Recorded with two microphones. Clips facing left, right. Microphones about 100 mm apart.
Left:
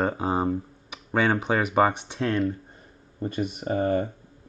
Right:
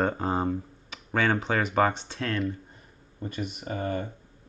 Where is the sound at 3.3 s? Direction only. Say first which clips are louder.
Left 7 dB; 35° left (ahead or behind).